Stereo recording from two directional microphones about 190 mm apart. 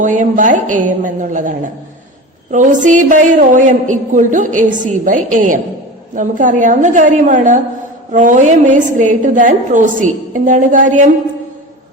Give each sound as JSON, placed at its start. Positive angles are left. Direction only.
{"t": 0.0, "sound": "a woman's voice", "side_deg": -40}